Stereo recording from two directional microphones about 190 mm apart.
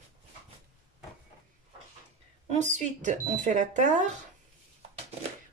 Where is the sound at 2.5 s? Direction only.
40° right (ahead or behind).